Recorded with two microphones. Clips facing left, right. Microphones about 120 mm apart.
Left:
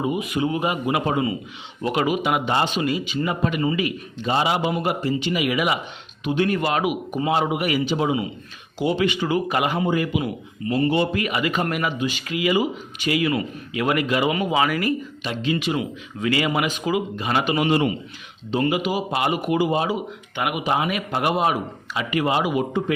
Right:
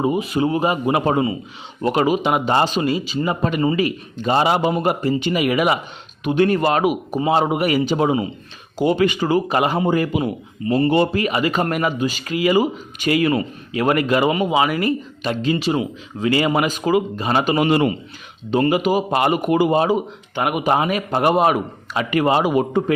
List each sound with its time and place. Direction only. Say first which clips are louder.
0.0 s speech: right 4 dB; 35° right (ahead or behind)
14.3 s speech: right 3 dB; 25° right (ahead or behind)
15.2 s speech: right 7 dB; 40° right (ahead or behind)
17.7 s a man's voice: right 2 dB; 60° right (ahead or behind)
18.5 s speech: right 5 dB; 45° right (ahead or behind)
21.4 s speech: right 4 dB; 55° right (ahead or behind)